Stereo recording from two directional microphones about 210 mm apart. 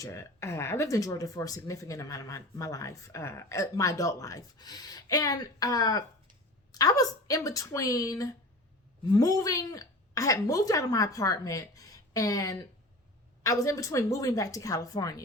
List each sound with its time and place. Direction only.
0.0 s speech: 15° left (ahead or behind)